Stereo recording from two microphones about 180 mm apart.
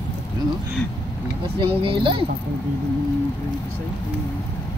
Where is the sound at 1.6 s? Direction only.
30° right (ahead or behind).